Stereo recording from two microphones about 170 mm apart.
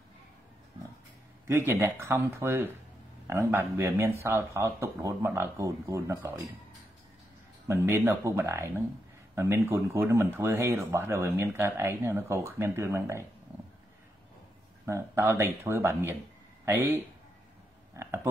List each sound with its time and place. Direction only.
1.7 s speech: 15° right (ahead or behind)
7.6 s speech: 15° right (ahead or behind)
14.9 s speech: 15° right (ahead or behind)